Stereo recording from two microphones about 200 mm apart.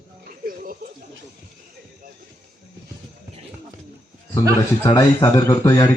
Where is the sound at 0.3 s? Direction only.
45° right (ahead or behind).